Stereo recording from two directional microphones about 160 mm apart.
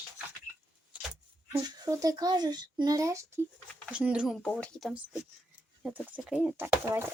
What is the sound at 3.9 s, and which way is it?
A child's voice, 5° right (ahead or behind).